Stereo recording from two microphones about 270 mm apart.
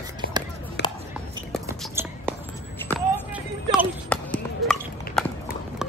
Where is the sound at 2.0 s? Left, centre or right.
Centre.